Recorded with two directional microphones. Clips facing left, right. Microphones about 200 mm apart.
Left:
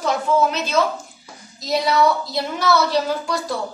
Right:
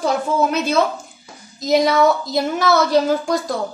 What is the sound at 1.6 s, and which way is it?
A woman's voice, 45° right (ahead or behind).